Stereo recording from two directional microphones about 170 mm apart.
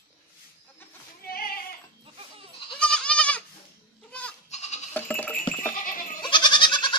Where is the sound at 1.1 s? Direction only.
60° left (ahead or behind).